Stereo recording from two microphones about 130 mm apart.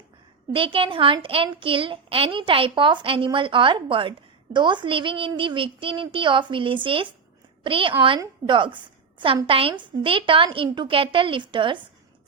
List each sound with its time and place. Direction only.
0.5 s a woman's voice: 45° right (ahead or behind)